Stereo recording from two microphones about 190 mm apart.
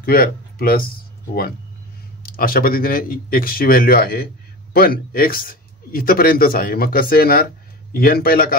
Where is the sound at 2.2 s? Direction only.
50° left (ahead or behind).